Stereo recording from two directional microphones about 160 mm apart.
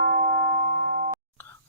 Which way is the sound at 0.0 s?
55° right (ahead or behind).